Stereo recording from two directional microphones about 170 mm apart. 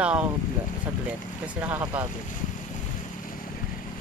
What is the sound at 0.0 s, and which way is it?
Boat, 5° right (ahead or behind).